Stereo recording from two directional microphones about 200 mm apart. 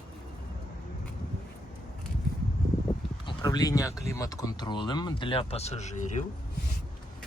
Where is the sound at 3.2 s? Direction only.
20° left (ahead or behind).